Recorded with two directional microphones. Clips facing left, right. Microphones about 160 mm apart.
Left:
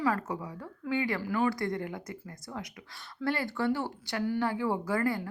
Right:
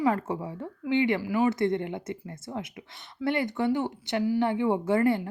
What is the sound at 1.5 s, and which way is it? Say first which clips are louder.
Speech: right 6 dB; 25° right (ahead or behind).